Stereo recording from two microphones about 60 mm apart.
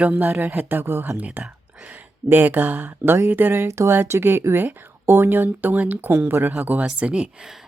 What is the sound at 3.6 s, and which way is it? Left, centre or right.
Speech, right.